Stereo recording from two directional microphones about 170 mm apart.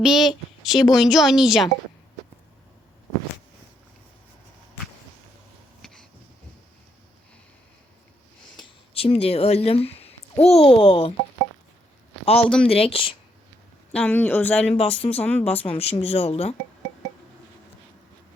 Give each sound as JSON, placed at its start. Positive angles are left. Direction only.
{"t": 0.0, "sound": "a woman's voice", "side_deg": 0}
{"t": 5.8, "sound": "a sound", "side_deg": 5}
{"t": 8.6, "sound": "speech", "side_deg": 35}
{"t": 12.2, "sound": "speech", "side_deg": 35}
{"t": 12.5, "sound": "a woman's voice", "side_deg": 5}
{"t": 12.7, "sound": "speech", "side_deg": 35}
{"t": 13.9, "sound": "speech", "side_deg": 10}
{"t": 14.7, "sound": "speech", "side_deg": 35}
{"t": 15.2, "sound": "speech", "side_deg": 10}
{"t": 15.4, "sound": "speech", "side_deg": 35}